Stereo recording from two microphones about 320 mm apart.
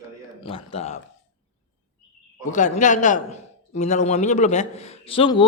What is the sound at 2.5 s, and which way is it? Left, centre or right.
Speech, left.